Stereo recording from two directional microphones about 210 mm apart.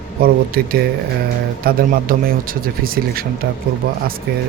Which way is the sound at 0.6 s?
45° right (ahead or behind).